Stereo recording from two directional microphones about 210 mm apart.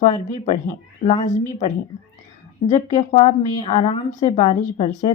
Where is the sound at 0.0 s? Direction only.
35° left (ahead or behind).